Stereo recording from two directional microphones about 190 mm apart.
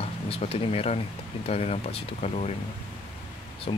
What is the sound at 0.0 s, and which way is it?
Speech, 30° left (ahead or behind).